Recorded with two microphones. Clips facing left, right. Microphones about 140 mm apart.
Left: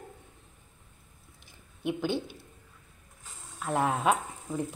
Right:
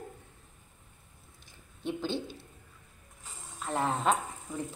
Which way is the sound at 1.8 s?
15° left (ahead or behind).